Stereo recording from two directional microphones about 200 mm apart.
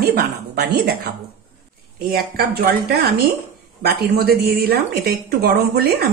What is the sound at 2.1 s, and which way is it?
A woman's voice, 50° right (ahead or behind).